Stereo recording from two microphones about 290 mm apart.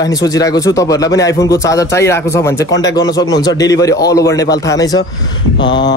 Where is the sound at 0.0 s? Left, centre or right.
Centre.